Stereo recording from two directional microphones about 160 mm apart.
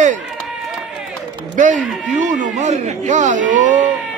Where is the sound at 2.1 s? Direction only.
50° right (ahead or behind).